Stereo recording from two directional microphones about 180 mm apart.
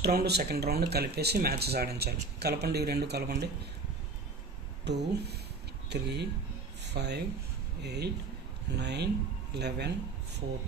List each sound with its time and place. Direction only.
0.0 s speech: 65° right (ahead or behind)
4.8 s speech: 70° right (ahead or behind)